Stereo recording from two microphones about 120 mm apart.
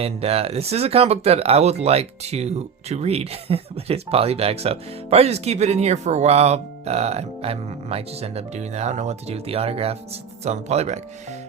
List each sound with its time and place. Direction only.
0.0 s speech: 55° right (ahead or behind); by 11.3 s 70° right (ahead or behind)